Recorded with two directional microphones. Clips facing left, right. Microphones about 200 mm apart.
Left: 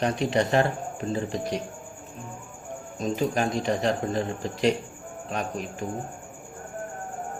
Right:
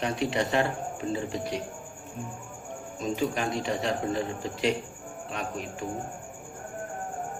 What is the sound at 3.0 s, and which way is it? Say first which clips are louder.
Speech: left 3 dB; 40° left (ahead or behind).